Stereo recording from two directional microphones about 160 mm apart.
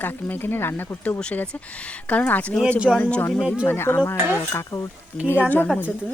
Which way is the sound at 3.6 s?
15° left (ahead or behind).